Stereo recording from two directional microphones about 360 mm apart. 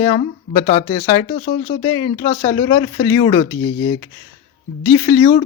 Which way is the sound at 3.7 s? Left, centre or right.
Left.